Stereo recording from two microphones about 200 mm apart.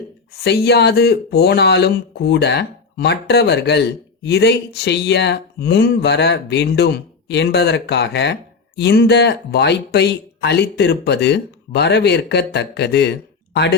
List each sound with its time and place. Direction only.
0.4 s speech: 55° left (ahead or behind)